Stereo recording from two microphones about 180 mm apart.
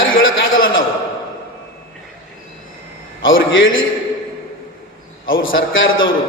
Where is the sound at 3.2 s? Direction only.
90° left.